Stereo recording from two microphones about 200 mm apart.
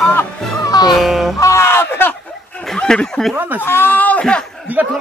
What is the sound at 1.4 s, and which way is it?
Speech, 15° left (ahead or behind).